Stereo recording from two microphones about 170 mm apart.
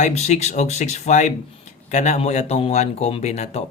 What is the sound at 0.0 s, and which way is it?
Speech, 40° left (ahead or behind).